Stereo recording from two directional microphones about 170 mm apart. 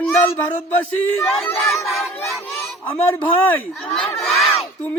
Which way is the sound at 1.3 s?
Centre (ahead or behind).